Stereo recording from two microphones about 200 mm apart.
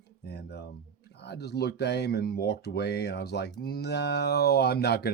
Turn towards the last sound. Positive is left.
turn(degrees=55)  # may be behind; listen again after turning